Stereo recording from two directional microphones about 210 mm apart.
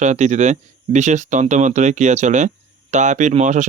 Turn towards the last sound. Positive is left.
turn(degrees=-35)  # may be behind; listen again after turning